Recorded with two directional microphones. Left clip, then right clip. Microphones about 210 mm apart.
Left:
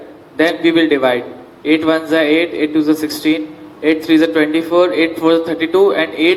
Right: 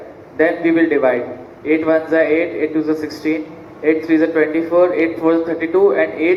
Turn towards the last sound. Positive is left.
turn(degrees=65)  # may be behind; listen again after turning